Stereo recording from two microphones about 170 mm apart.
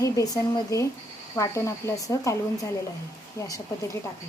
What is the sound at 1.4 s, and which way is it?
Speech, 15° left (ahead or behind).